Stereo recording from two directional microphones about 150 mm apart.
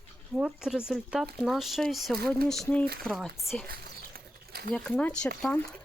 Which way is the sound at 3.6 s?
85° right.